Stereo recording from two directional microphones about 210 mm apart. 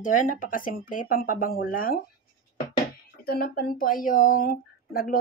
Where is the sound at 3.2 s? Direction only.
45° left (ahead or behind).